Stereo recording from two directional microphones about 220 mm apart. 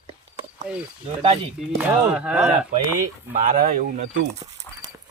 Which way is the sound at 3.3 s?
40° right (ahead or behind).